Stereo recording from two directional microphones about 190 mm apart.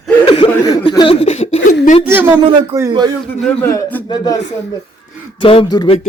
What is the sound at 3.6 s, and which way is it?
Speech, 15° left (ahead or behind).